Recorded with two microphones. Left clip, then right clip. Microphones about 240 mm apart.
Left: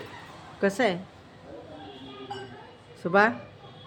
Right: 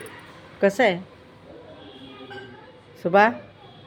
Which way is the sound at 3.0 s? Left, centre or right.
Centre.